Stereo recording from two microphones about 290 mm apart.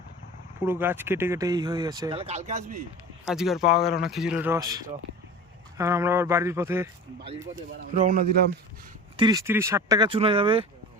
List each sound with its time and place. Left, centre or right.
0.6 s speech: centre; by 2.7 s right
3.2 s speech: centre
7.9 s speech: right
9.1 s speech: centre